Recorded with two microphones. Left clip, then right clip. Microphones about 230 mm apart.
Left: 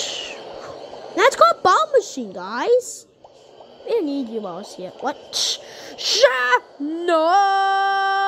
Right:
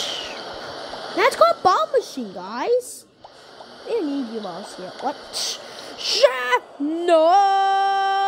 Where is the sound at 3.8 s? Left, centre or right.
Centre.